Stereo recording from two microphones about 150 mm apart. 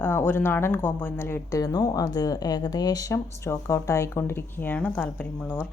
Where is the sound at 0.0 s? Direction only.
15° left (ahead or behind).